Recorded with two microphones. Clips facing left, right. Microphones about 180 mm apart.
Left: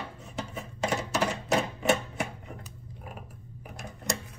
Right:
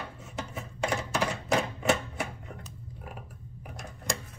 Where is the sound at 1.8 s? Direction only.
Centre (ahead or behind).